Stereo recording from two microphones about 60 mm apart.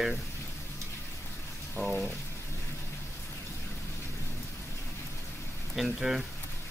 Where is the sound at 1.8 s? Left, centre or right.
Left.